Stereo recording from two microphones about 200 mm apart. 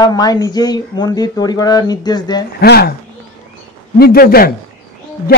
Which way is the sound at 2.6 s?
55° left (ahead or behind).